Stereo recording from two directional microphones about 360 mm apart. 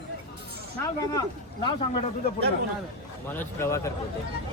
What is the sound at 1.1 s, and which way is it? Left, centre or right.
Speech, centre.